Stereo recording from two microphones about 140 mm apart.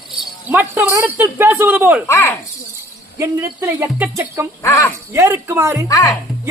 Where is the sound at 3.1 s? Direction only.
20° right (ahead or behind).